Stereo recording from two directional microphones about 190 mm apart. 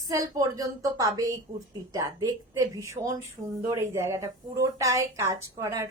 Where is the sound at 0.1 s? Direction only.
20° right (ahead or behind).